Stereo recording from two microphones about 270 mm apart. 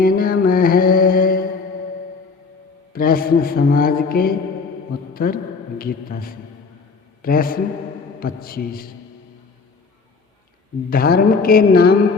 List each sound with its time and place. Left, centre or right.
0.0 s mantra: left
2.9 s a man's voice: left
10.8 s a man's voice: left